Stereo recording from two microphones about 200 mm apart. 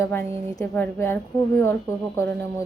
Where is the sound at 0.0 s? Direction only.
10° left (ahead or behind).